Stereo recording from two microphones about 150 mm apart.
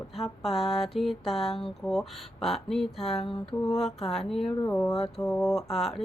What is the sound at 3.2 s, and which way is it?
Mantra, 40° left (ahead or behind).